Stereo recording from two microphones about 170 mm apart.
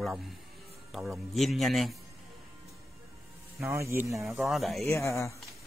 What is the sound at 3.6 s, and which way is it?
Speech, 15° right (ahead or behind).